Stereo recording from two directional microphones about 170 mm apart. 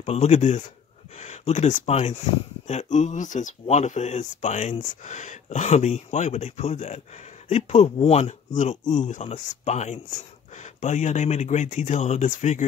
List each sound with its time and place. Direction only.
0.0 s speech: 40° left (ahead or behind)